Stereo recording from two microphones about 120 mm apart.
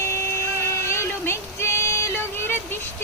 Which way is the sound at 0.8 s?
20° left (ahead or behind).